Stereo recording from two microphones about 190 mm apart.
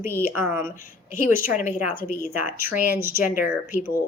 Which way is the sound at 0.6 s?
45° left (ahead or behind).